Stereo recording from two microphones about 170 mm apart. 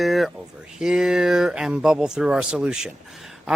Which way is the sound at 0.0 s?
Centre (ahead or behind).